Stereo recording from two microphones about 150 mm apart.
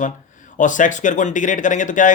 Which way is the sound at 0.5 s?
60° left (ahead or behind).